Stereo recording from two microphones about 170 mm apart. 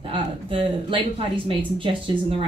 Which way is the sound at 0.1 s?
30° right (ahead or behind).